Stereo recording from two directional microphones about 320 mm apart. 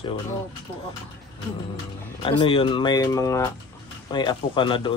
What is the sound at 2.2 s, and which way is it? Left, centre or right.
Speech, centre.